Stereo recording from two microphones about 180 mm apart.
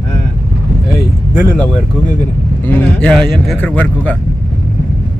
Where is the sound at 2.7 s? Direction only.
10° left (ahead or behind).